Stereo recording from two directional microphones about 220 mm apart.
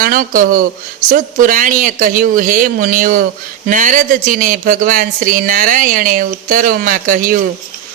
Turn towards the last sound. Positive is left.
turn(degrees=-40)  # may be behind; listen again after turning